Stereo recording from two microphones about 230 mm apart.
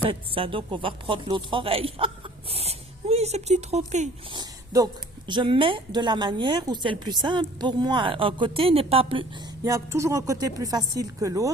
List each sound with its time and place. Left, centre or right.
0.1 s speech: right
4.4 s a sound: centre
5.3 s a woman's voice: right
9.6 s a woman's voice: centre